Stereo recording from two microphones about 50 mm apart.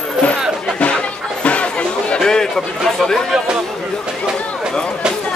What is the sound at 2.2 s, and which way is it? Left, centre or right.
A man's voice, centre.